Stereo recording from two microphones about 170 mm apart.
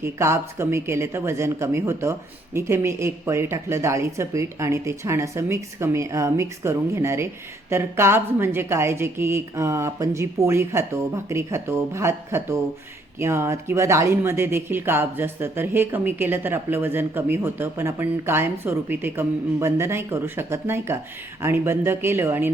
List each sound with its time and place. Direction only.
0.0 s speech: 15° right (ahead or behind)